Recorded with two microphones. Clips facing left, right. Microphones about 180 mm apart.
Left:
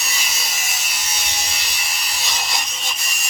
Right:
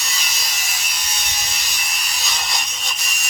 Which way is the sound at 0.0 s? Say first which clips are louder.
Left 1 dB; 5° left (ahead or behind).